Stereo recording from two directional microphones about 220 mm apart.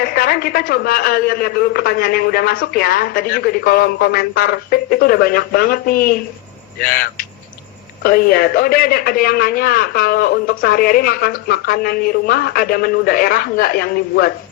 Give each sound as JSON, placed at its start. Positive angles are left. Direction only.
{"t": 0.0, "sound": "a man's voice", "side_deg": 45}